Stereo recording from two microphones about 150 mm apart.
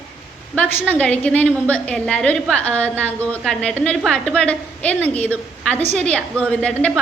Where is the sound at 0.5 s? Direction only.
10° left (ahead or behind).